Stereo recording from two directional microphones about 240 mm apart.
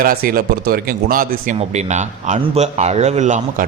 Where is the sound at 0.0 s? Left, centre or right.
Right.